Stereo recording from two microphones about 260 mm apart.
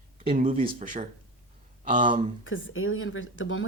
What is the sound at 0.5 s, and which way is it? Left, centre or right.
Speech, right.